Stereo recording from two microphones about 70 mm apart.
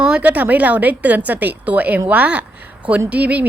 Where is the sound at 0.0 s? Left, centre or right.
Centre.